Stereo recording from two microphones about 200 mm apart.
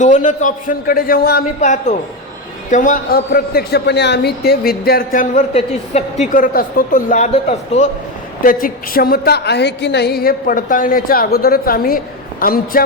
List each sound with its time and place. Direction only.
0.0 s a woman's voice: 40° left (ahead or behind)
6.3 s speech: 45° left (ahead or behind)
8.4 s a woman's voice: 45° left (ahead or behind)